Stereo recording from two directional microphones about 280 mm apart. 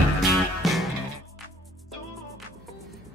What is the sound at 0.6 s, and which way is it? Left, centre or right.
Music, centre.